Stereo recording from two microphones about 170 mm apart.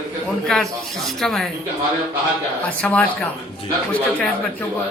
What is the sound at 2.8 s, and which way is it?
Speech, 10° left (ahead or behind).